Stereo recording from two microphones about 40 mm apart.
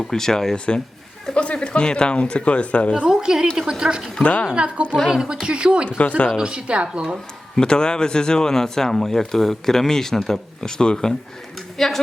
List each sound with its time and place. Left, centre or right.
0.0 s speech: centre
0.5 s speech: left
3.1 s a woman's voice: centre
4.2 s speech: left
4.5 s a woman's voice: right
6.0 s speech: left
6.3 s a woman's voice: right
7.5 s speech: left